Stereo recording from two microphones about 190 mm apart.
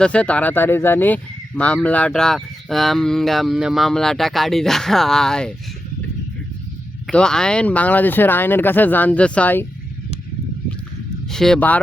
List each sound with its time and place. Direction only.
0.0 s speech: 5° left (ahead or behind)
7.1 s speech: 5° left (ahead or behind)
11.3 s speech: centre (ahead or behind)